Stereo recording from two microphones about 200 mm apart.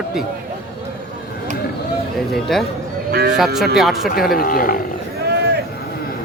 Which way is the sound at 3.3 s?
Centre (ahead or behind).